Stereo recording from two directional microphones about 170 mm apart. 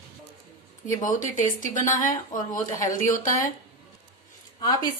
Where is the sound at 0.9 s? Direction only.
50° left (ahead or behind).